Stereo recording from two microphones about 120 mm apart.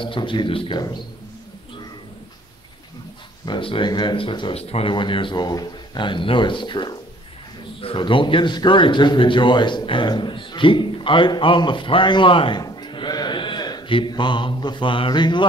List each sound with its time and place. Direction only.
0.0 s speech: 45° left (ahead or behind)
3.4 s speech: 45° left (ahead or behind)
12.6 s a sound: 40° left (ahead or behind)